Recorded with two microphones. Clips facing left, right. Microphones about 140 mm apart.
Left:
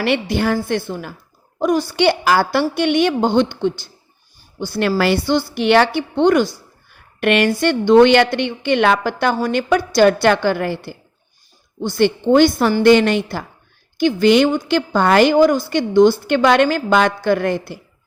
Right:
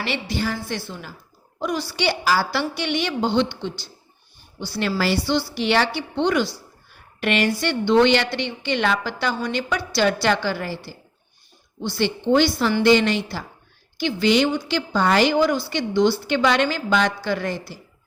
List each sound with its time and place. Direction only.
0.0 s a woman's voice: 55° left (ahead or behind)